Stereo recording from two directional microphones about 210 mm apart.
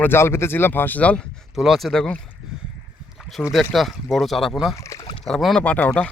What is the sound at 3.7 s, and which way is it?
Speech, centre (ahead or behind).